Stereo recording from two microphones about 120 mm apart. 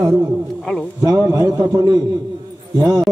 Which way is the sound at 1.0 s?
30° right (ahead or behind).